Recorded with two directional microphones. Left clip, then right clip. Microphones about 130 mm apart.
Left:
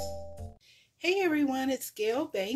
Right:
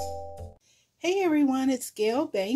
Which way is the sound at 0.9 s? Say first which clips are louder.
Right 3 dB; 40° right (ahead or behind).